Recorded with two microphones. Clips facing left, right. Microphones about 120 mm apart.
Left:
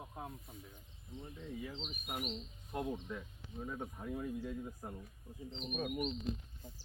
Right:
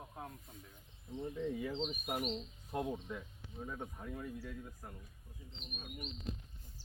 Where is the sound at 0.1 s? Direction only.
10° left (ahead or behind).